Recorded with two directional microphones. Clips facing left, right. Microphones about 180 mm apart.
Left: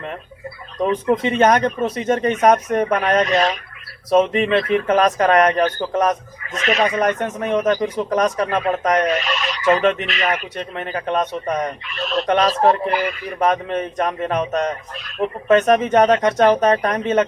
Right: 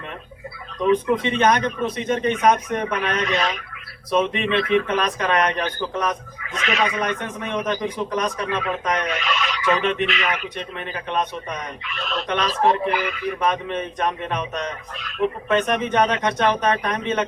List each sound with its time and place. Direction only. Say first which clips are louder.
1.2 s speech: left 4 dB; 40° left (ahead or behind)